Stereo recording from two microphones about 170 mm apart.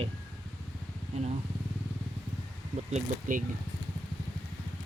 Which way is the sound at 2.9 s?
50° right (ahead or behind).